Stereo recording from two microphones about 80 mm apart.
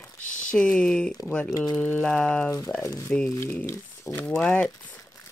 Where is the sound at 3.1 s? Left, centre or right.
Centre.